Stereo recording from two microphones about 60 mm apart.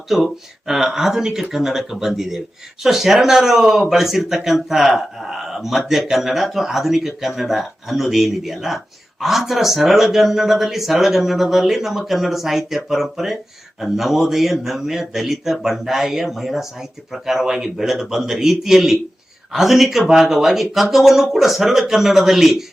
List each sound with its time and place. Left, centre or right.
0.1 s speech: centre